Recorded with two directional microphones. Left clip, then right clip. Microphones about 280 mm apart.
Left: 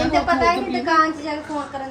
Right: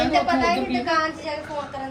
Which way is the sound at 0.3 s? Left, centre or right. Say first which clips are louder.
Left 3 dB; left.